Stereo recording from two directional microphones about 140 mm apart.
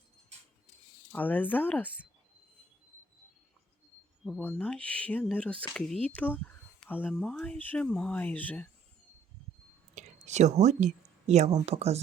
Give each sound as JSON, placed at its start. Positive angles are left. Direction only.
{"t": 1.1, "sound": "speech", "side_deg": 10}
{"t": 4.4, "sound": "speech", "side_deg": 10}
{"t": 9.9, "sound": "whispering", "side_deg": -55}
{"t": 11.3, "sound": "speech", "side_deg": -50}